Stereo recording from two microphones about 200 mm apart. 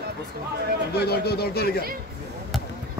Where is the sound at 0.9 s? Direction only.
50° left (ahead or behind).